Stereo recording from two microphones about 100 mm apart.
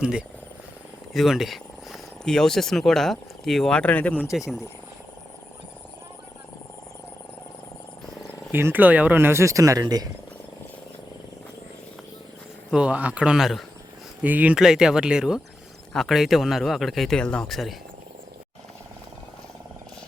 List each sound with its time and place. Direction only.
0.0 s speech: 10° right (ahead or behind); by 4.2 s 15° left (ahead or behind)
4.4 s speech: 5° right (ahead or behind)
8.5 s speech: 20° right (ahead or behind); by 10.1 s 40° right (ahead or behind)
12.7 s speech: 10° right (ahead or behind)
14.2 s speech: 15° right (ahead or behind); by 17.7 s centre (ahead or behind)